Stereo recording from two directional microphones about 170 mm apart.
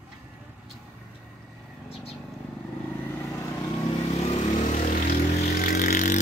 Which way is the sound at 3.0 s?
15° left (ahead or behind).